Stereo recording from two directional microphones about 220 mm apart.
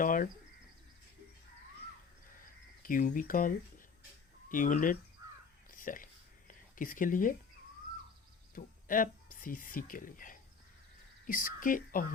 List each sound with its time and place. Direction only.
0.0 s bird: 35° left (ahead or behind)
2.8 s speech: 40° left (ahead or behind)
5.7 s a sound: 40° left (ahead or behind)
6.5 s speech: 40° left (ahead or behind)
8.5 s speech: 40° left (ahead or behind)